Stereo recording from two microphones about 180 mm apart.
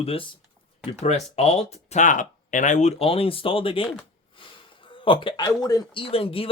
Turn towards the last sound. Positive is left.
turn(degrees=30)  # may be behind; listen again after turning